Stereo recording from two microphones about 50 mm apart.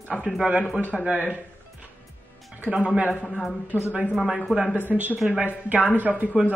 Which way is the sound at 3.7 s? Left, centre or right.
Right.